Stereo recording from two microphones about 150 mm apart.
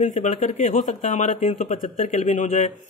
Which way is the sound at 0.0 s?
55° left (ahead or behind).